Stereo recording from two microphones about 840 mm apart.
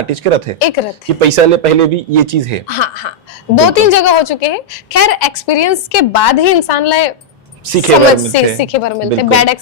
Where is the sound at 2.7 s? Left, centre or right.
Left.